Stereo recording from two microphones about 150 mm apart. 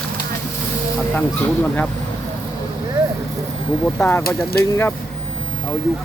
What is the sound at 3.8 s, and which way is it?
Speech, 10° left (ahead or behind).